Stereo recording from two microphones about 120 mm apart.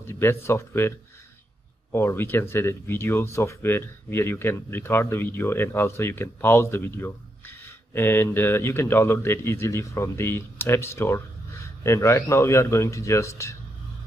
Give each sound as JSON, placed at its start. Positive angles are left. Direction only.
{"t": 0.0, "sound": "speech", "side_deg": 20}